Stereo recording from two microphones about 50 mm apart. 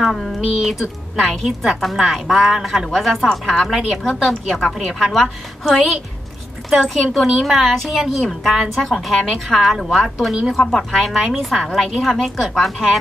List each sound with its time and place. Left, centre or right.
0.0 s a woman's voice: centre
3.3 s a woman's voice: centre
3.6 s a woman's voice: centre
6.9 s a woman's voice: centre